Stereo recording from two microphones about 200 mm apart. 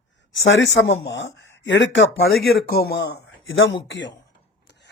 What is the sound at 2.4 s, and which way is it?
Speech, 50° left (ahead or behind).